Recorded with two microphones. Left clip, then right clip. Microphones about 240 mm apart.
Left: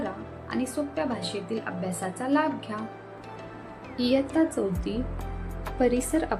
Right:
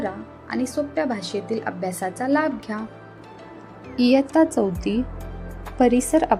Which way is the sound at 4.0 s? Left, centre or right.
Right.